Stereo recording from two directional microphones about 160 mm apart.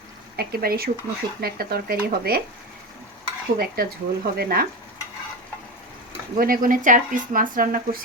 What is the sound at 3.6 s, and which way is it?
Speech, 70° right (ahead or behind).